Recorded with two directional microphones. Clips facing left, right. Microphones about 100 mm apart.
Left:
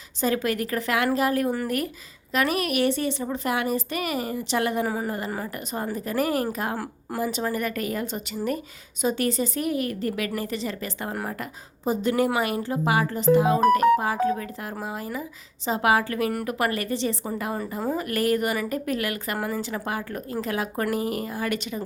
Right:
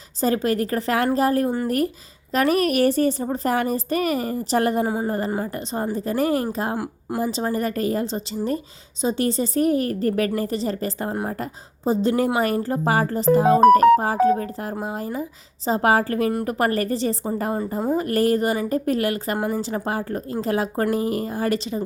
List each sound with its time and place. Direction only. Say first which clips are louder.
0.2 s a woman's voice: right 4 dB; 35° right (ahead or behind)
6.7 s speech: right 4 dB; 15° right (ahead or behind)
7.2 s a woman's voice: right 3 dB; 30° right (ahead or behind)